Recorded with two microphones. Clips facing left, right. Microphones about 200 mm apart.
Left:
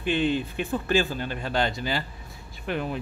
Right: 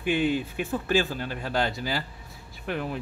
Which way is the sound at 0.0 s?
10° right (ahead or behind).